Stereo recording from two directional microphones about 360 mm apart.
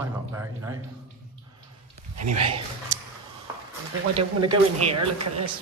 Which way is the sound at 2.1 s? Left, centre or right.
Right.